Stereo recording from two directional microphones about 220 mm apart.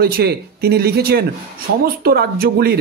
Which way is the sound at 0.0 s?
45° right (ahead or behind).